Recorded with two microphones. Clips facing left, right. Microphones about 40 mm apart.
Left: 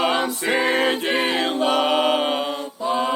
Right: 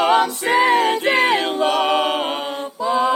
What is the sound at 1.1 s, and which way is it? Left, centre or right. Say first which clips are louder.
Choir: right 5 dB; right.